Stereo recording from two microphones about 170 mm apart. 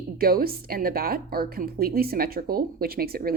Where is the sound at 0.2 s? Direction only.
60° right (ahead or behind).